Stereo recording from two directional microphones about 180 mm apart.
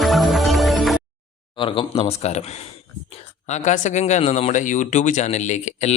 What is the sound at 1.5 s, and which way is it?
Speech, 30° left (ahead or behind).